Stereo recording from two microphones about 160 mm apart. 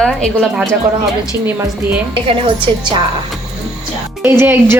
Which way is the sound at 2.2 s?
30° right (ahead or behind).